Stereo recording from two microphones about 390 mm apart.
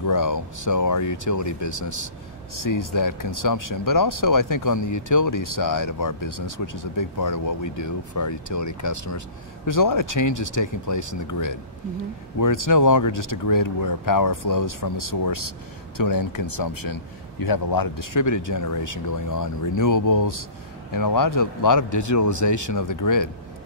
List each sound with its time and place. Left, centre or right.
0.0 s speech: left